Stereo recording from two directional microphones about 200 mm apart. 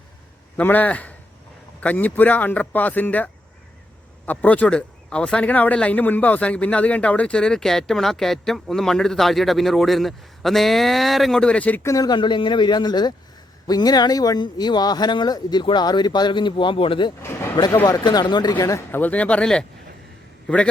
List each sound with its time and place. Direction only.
0.5 s speech: 10° left (ahead or behind)
4.3 s speech: 5° left (ahead or behind); by 17.1 s 25° left (ahead or behind)
17.2 s speech: 15° left (ahead or behind)